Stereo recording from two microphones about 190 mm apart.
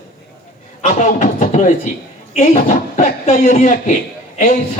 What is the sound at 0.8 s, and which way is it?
A man's voice, 40° left (ahead or behind).